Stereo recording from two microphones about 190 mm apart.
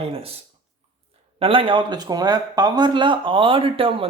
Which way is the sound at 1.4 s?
30° right (ahead or behind).